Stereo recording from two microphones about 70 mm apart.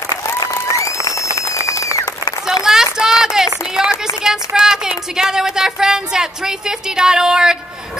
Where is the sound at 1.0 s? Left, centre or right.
Left.